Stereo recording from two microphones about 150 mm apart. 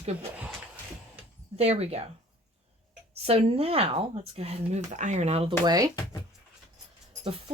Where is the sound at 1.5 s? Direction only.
45° right (ahead or behind).